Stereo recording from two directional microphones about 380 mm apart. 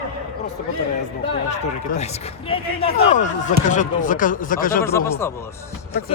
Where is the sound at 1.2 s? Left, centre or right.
Centre.